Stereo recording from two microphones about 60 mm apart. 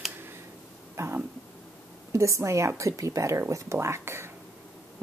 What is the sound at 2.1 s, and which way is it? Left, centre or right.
A woman's voice, right.